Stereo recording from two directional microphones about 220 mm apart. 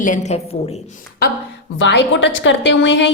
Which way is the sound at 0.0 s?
35° left (ahead or behind).